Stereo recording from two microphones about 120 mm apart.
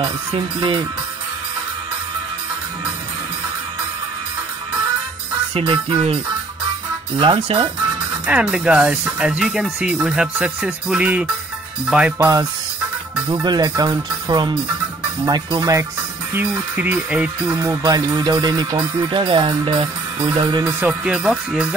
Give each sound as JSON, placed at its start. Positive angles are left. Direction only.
{"t": 0.0, "sound": "speech", "side_deg": -45}
{"t": 5.5, "sound": "speech", "side_deg": -50}
{"t": 7.2, "sound": "speech", "side_deg": -50}
{"t": 8.3, "sound": "speech", "side_deg": -10}
{"t": 12.2, "sound": "speech", "side_deg": -30}
{"t": 16.3, "sound": "speech", "side_deg": -15}
{"t": 17.5, "sound": "speech", "side_deg": -35}
{"t": 20.8, "sound": "speech", "side_deg": -5}